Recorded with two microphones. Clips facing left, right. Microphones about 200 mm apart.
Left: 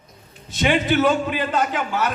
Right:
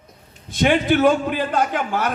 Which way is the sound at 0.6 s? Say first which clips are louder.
Right 2 dB; 50° right (ahead or behind).